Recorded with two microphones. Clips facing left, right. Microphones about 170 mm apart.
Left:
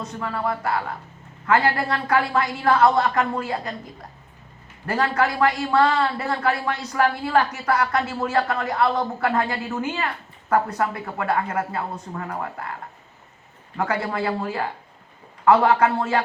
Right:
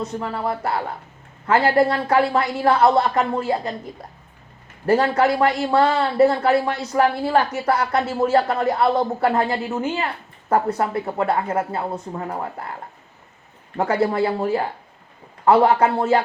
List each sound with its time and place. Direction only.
0.0 s a man's voice: 30° right (ahead or behind)
4.9 s a man's voice: 30° right (ahead or behind)
13.7 s a man's voice: 30° right (ahead or behind)